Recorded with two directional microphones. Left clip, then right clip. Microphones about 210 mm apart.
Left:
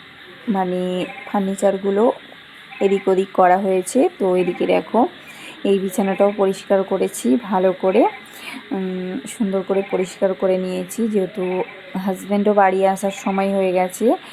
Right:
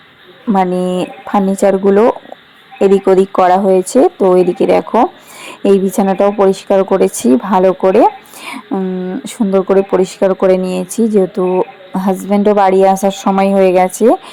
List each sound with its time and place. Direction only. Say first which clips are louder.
0.5 s speech: right 8 dB; 20° right (ahead or behind)